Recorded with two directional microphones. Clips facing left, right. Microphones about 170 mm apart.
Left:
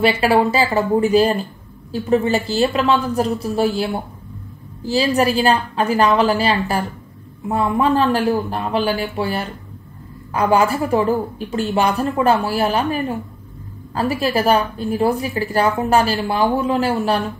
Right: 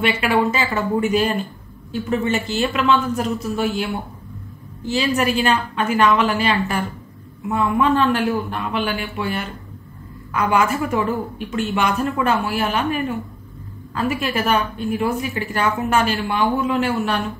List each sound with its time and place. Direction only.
0.0 s a woman's voice: 35° left (ahead or behind)